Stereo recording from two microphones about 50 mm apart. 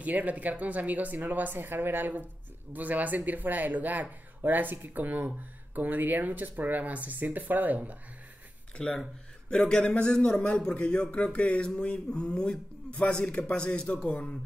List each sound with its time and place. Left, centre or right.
0.0 s speech: right
8.7 s speech: centre